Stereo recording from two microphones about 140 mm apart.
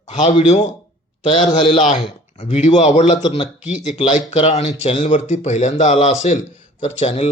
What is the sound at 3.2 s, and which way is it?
Speech, 35° left (ahead or behind).